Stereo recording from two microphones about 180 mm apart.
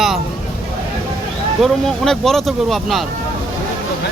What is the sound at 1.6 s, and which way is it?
Speech, centre (ahead or behind).